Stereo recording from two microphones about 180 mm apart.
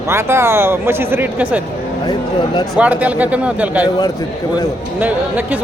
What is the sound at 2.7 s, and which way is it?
Speech, 10° right (ahead or behind).